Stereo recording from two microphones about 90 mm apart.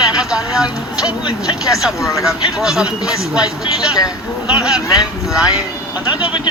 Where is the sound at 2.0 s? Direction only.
35° left (ahead or behind).